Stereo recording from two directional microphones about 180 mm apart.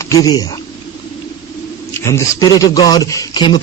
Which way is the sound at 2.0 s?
15° left (ahead or behind).